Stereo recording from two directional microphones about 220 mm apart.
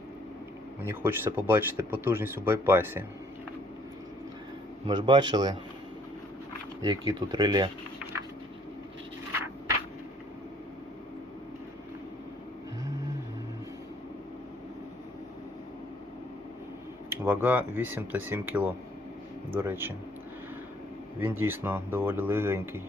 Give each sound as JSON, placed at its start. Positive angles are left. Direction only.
{"t": 0.8, "sound": "speech", "side_deg": -10}
{"t": 4.9, "sound": "speech", "side_deg": -20}
{"t": 6.8, "sound": "speech", "side_deg": -20}
{"t": 17.1, "sound": "speech", "side_deg": -10}
{"t": 21.2, "sound": "speech", "side_deg": -10}